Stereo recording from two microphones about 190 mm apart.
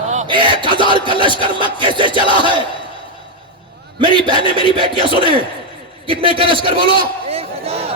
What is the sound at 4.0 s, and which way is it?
Music, 25° right (ahead or behind).